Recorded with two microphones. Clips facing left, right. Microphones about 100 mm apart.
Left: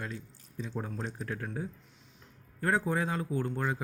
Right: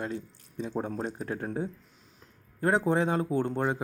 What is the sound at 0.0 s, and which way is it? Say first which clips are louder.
Speech: right 6 dB; 30° right (ahead or behind).